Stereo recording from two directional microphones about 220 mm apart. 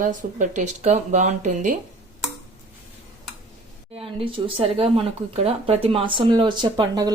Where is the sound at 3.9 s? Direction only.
25° right (ahead or behind).